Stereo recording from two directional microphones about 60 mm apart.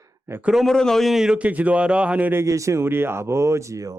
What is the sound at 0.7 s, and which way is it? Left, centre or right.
Speech, centre.